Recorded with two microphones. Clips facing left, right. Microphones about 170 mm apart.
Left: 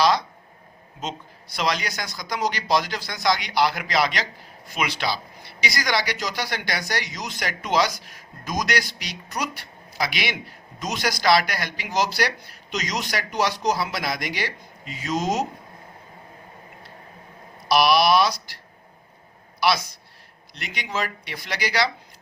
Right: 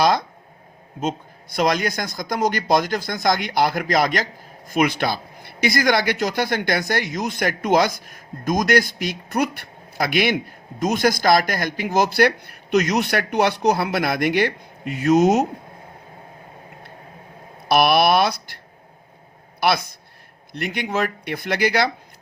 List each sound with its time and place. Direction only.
0.0 s speech: 50° right (ahead or behind)
1.5 s speech: 50° right (ahead or behind)
17.7 s speech: 55° right (ahead or behind)